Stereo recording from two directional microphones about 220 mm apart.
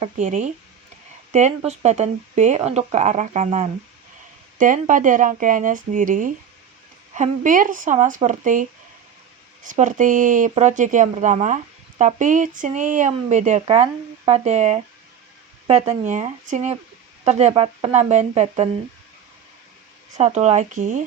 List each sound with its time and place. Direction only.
0.0 s speech: 30° right (ahead or behind)
9.6 s speech: 35° right (ahead or behind)
20.1 s speech: 30° right (ahead or behind)